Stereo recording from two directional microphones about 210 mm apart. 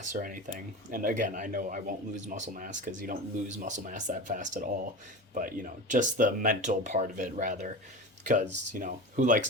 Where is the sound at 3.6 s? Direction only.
35° right (ahead or behind).